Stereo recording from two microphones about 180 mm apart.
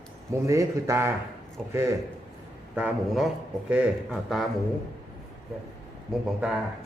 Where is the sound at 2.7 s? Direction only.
5° right (ahead or behind).